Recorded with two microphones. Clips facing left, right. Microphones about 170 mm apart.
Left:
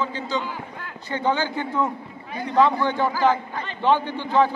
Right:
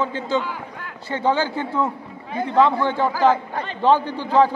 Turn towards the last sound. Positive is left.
turn(degrees=-40)  # may be behind; listen again after turning